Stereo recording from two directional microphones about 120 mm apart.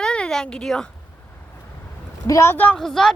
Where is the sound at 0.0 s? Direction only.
5° left (ahead or behind).